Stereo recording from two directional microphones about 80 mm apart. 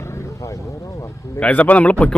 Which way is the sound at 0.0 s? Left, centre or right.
Left.